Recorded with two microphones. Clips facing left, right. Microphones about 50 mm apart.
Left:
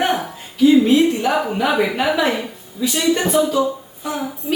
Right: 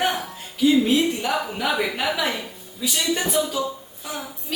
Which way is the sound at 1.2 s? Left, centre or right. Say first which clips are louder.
Left 6 dB; centre.